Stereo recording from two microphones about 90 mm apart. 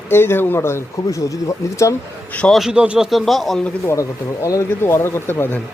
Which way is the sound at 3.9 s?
35° left (ahead or behind).